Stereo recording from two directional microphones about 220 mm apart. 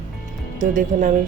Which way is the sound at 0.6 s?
35° right (ahead or behind).